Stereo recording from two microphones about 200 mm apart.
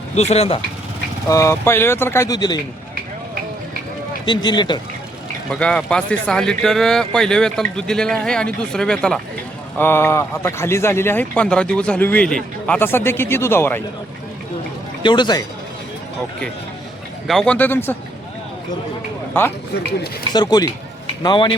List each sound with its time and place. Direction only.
0.2 s speech: 30° left (ahead or behind)
1.3 s a man's voice: 15° left (ahead or behind)
4.3 s speech: 20° left (ahead or behind)
5.5 s a man's voice: 5° left (ahead or behind)
15.0 s speech: 20° left (ahead or behind)
17.2 s a man's voice: 5° left (ahead or behind)
19.3 s a man's voice: 10° left (ahead or behind)
20.3 s speech: 20° left (ahead or behind)